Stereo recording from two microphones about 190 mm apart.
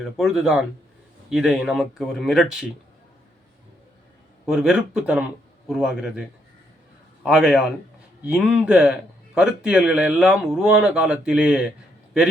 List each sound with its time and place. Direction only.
0.0 s speech: centre (ahead or behind)
4.4 s speech: centre (ahead or behind)